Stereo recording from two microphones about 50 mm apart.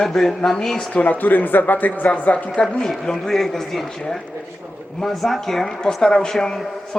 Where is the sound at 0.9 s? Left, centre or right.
Left.